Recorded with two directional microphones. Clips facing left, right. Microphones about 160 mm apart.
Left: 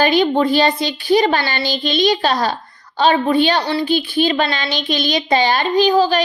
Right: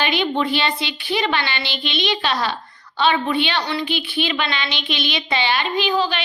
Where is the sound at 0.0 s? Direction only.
40° left (ahead or behind).